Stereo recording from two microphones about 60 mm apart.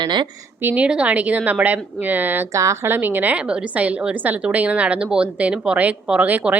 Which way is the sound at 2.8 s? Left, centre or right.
Right.